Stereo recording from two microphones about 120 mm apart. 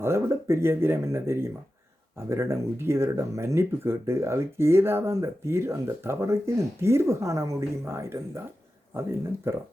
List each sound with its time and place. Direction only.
0.0 s speech: 20° right (ahead or behind)